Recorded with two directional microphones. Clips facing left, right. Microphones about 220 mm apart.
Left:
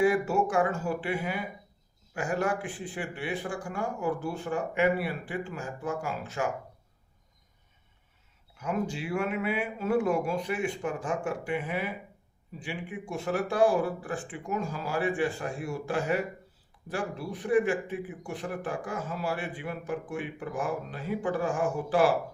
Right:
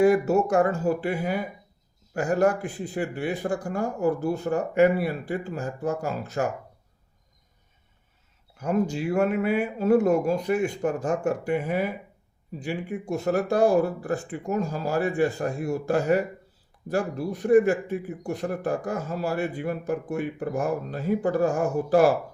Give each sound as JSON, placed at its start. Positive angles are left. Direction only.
{"t": 0.0, "sound": "a man's voice", "side_deg": -40}
{"t": 8.5, "sound": "a man's voice", "side_deg": -40}